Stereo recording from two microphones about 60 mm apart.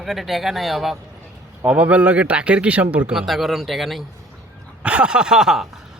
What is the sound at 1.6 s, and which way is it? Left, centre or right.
Speech, right.